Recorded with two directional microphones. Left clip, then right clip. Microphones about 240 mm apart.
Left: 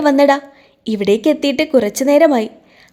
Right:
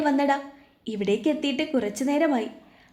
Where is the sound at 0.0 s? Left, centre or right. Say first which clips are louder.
Left 11 dB; left.